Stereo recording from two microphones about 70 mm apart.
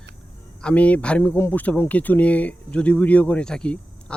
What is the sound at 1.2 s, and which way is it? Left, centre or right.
Speech, left.